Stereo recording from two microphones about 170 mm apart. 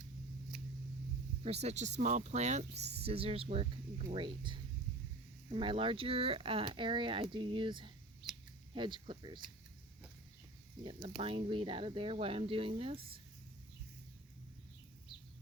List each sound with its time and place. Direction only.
1.5 s speech: 40° right (ahead or behind)
2.7 s speech: 80° right
3.0 s speech: 35° right (ahead or behind)
11.2 s speech: 30° right (ahead or behind)